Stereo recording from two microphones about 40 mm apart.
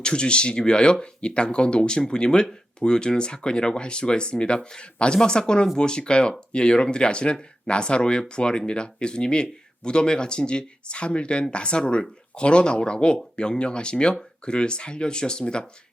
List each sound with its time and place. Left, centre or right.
0.0 s speech: left